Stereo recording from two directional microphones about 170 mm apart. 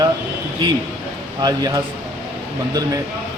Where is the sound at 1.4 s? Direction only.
25° right (ahead or behind).